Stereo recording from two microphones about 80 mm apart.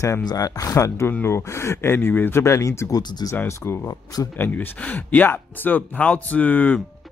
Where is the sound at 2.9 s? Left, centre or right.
Left.